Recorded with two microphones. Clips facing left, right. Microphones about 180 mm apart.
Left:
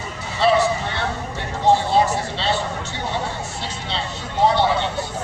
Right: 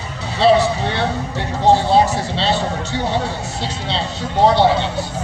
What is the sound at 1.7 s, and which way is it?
Music, 70° right (ahead or behind).